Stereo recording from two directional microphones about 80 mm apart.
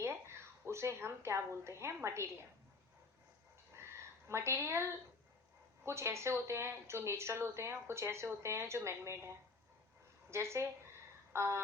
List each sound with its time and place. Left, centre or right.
0.0 s a woman's voice: right
4.3 s a woman's voice: right
11.3 s a sound: right